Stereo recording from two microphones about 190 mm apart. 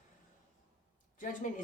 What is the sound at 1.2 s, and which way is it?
Speech, 45° left (ahead or behind).